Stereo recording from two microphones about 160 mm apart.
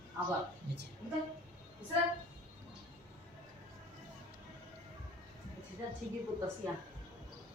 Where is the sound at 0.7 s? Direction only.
90° right.